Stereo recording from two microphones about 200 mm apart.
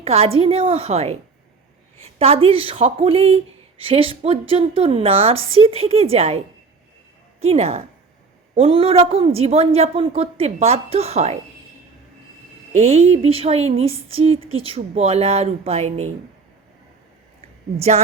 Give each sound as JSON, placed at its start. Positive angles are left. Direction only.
{"t": 0.0, "sound": "speech", "side_deg": -30}
{"t": 2.1, "sound": "speech", "side_deg": -30}
{"t": 7.4, "sound": "speech", "side_deg": -30}
{"t": 12.7, "sound": "speech", "side_deg": -30}
{"t": 17.7, "sound": "speech", "side_deg": -30}